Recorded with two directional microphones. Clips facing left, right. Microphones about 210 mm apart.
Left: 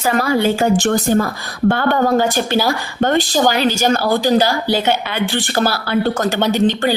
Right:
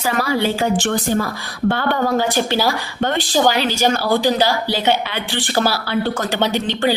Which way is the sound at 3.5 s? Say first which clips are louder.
Left 2 dB; 45° left (ahead or behind).